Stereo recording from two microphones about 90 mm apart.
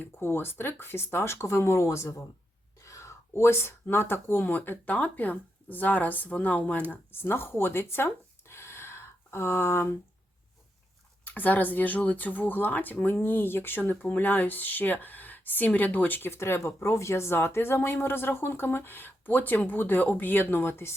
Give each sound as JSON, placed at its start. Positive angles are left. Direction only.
{"t": 0.0, "sound": "speech", "side_deg": 25}
{"t": 11.3, "sound": "speech", "side_deg": 20}